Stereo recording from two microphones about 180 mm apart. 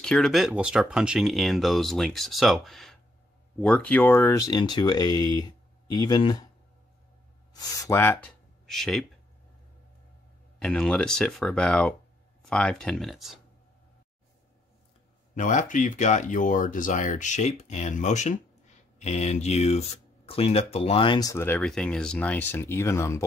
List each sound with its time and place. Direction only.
0.0 s speech: 5° left (ahead or behind); by 6.4 s 20° left (ahead or behind)
7.5 s speech: 15° left (ahead or behind)
8.6 s speech: centre (ahead or behind)
10.6 s speech: 5° left (ahead or behind)
15.3 s speech: 45° left (ahead or behind); by 21.5 s 15° left (ahead or behind)
21.5 s speech: 5° left (ahead or behind)